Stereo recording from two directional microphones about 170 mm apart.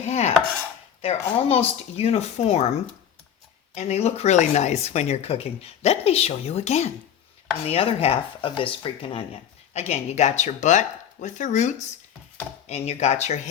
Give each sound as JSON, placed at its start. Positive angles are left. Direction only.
{"t": 0.0, "sound": "speech", "side_deg": 40}
{"t": 3.8, "sound": "speech", "side_deg": 40}